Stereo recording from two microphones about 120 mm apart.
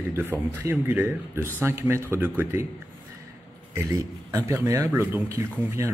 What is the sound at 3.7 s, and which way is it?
Speech, 25° right (ahead or behind).